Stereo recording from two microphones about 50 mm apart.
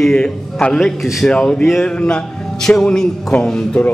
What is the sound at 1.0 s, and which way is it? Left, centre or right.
Speech, centre.